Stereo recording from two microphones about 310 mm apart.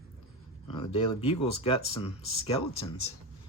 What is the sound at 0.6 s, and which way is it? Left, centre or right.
Speech, centre.